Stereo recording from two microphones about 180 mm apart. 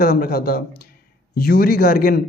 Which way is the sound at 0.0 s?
55° left (ahead or behind).